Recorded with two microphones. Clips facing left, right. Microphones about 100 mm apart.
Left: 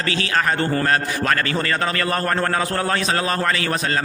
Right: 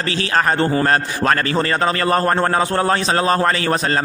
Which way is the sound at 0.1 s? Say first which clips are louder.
Right 3 dB; 35° right (ahead or behind).